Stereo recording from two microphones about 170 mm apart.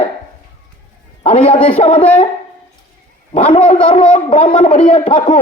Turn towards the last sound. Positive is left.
turn(degrees=35)  # may be behind; listen again after turning